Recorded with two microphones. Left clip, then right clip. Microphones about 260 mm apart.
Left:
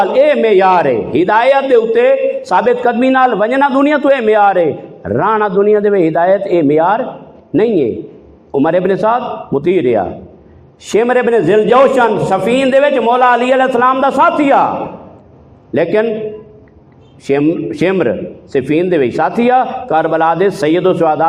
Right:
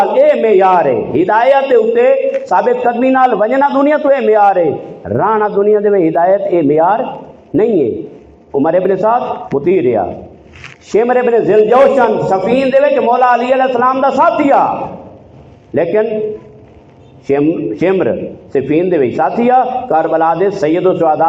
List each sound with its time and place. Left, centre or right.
0.0 s a man's voice: left
15.7 s a man's voice: left
17.2 s a man's voice: left